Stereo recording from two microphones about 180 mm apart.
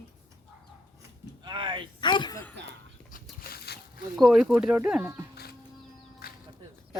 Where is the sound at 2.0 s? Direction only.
25° left (ahead or behind).